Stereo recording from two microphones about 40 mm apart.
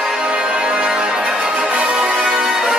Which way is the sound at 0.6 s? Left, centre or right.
Right.